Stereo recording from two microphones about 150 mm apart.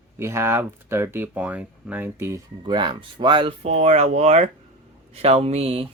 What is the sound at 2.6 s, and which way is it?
Speech, 30° right (ahead or behind).